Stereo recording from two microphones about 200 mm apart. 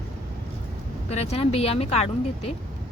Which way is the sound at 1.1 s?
35° left (ahead or behind).